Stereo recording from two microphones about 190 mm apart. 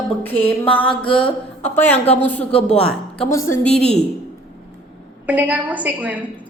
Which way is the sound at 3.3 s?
15° left (ahead or behind).